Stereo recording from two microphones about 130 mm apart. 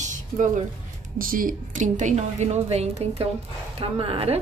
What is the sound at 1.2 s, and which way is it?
A woman's voice, 90° right.